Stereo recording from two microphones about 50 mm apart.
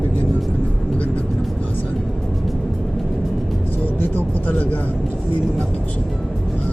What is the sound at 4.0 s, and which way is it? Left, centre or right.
Vehicle, left.